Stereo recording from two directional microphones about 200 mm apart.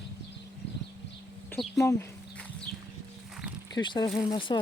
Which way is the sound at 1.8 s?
15° left (ahead or behind).